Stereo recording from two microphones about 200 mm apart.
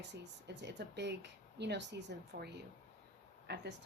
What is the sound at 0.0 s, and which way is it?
Speech, 60° right (ahead or behind).